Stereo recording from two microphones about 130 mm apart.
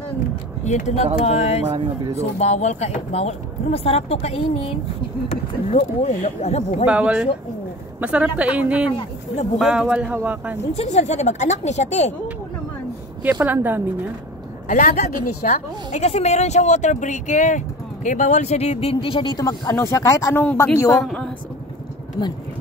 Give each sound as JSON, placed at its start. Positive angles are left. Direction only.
{"t": 0.7, "sound": "a woman's voice", "side_deg": 65}
{"t": 5.3, "sound": "a woman's voice", "side_deg": 60}
{"t": 6.9, "sound": "speech", "side_deg": -10}
{"t": 10.6, "sound": "a woman's voice", "side_deg": 55}
{"t": 13.2, "sound": "speech", "side_deg": -10}
{"t": 14.7, "sound": "a woman's voice", "side_deg": 90}
{"t": 21.0, "sound": "speech", "side_deg": 5}